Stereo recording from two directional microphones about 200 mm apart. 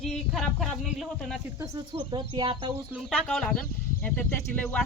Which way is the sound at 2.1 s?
25° right (ahead or behind).